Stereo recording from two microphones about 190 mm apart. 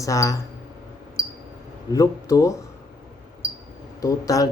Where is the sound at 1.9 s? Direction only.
20° left (ahead or behind).